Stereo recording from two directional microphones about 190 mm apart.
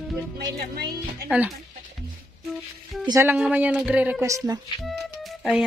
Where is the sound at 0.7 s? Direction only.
60° right (ahead or behind).